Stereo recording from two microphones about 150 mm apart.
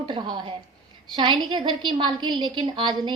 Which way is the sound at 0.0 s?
30° right (ahead or behind).